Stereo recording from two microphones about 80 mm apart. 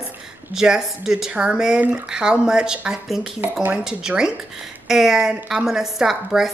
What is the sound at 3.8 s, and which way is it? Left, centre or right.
A woman's voice, centre.